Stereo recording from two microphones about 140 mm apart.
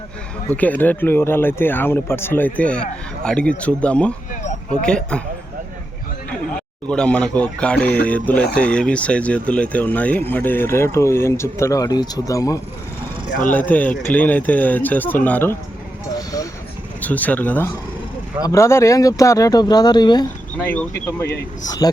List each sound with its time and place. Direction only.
0.5 s speech: 10° left (ahead or behind)
6.8 s speech: 5° left (ahead or behind); by 12.5 s 25° left (ahead or behind)
13.5 s speech: 10° left (ahead or behind)
16.1 s vehicle: 25° left (ahead or behind)
17.0 s speech: 10° left (ahead or behind); by 20.2 s 30° left (ahead or behind)
20.7 s speech: 15° left (ahead or behind)